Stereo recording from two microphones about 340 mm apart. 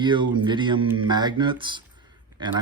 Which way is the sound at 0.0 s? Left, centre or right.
Centre.